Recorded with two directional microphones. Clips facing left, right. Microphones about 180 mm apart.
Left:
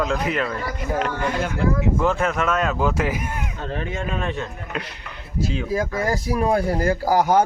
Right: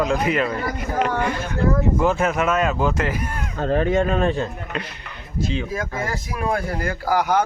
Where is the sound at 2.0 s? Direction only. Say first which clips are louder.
Right 1 dB; 5° right (ahead or behind).